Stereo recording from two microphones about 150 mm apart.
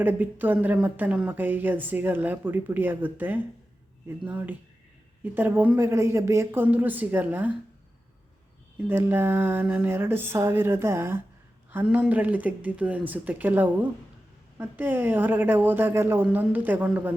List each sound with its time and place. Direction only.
0.0 s a woman's voice: 10° right (ahead or behind)
8.9 s a woman's voice: 15° right (ahead or behind)